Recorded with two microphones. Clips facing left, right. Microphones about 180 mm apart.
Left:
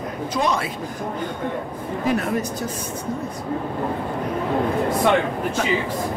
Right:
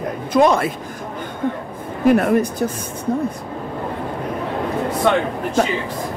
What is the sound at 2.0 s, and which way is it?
Speech, 55° right (ahead or behind).